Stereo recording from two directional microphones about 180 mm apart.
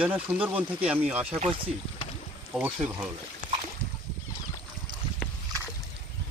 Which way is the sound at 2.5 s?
10° right (ahead or behind).